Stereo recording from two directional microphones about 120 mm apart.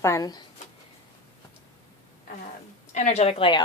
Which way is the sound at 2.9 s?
85° left.